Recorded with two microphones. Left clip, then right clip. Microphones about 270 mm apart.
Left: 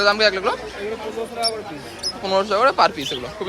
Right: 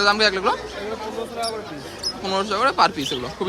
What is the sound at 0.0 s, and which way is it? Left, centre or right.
Speech, centre.